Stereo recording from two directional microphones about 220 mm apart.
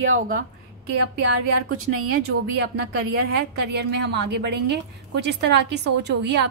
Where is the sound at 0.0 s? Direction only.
65° right (ahead or behind).